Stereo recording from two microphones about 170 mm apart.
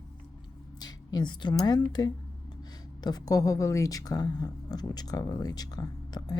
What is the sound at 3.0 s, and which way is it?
Speech, 20° left (ahead or behind).